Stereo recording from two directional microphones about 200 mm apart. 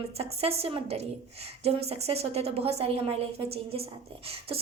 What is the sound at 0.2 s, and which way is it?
A woman's voice, 30° right (ahead or behind).